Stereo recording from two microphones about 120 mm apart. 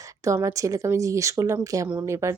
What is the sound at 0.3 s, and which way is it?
Speech, 25° right (ahead or behind).